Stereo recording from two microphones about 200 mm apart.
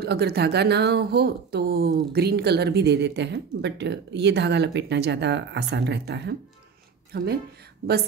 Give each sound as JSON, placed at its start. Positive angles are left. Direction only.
{"t": 0.0, "sound": "speech", "side_deg": -55}